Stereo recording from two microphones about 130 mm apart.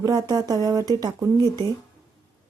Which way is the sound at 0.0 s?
30° right (ahead or behind).